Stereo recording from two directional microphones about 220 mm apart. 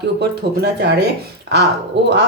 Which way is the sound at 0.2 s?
50° right (ahead or behind).